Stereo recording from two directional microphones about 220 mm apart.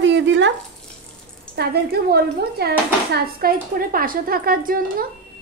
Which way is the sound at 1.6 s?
50° right (ahead or behind).